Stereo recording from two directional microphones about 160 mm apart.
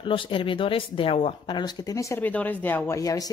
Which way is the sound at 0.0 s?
30° left (ahead or behind).